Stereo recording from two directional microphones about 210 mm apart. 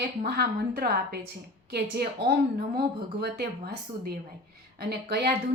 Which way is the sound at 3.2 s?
50° right (ahead or behind).